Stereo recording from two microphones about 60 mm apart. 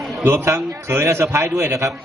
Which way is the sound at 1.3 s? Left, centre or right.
Right.